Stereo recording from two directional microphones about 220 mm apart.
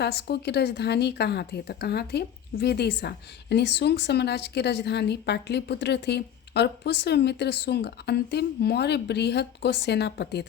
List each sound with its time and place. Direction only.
0.0 s a woman's voice: 45° left (ahead or behind)